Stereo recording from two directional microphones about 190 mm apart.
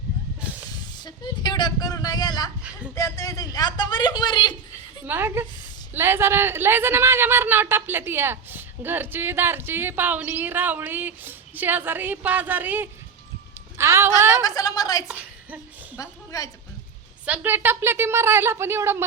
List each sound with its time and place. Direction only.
0.9 s a man's voice: 25° left (ahead or behind)
5.0 s a man's voice: 10° right (ahead or behind)
14.4 s a man's voice: 20° left (ahead or behind)
15.0 s a sound: 10° right (ahead or behind)
16.0 s a woman's voice: 20° left (ahead or behind)
17.2 s speech: 10° right (ahead or behind)